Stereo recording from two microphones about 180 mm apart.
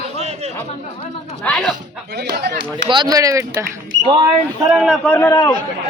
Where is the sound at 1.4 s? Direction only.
5° left (ahead or behind).